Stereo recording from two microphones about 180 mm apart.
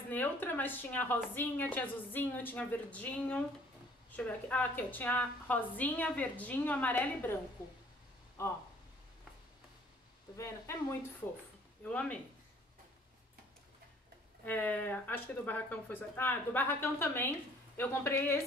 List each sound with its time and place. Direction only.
0.1 s a woman's voice: 10° left (ahead or behind)
8.4 s a woman's voice: 15° left (ahead or behind)
10.3 s a woman's voice: 15° left (ahead or behind)
14.4 s a woman's voice: 10° left (ahead or behind)